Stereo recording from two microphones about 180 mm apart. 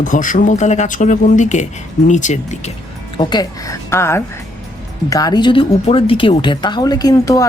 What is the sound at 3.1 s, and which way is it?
A woman's voice, 25° left (ahead or behind).